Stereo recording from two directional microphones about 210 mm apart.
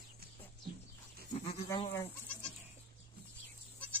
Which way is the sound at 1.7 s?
20° left (ahead or behind).